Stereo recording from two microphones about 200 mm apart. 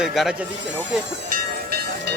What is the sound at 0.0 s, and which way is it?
Speech, centre (ahead or behind).